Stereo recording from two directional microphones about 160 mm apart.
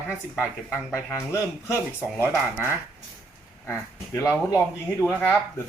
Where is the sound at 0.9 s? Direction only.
15° left (ahead or behind).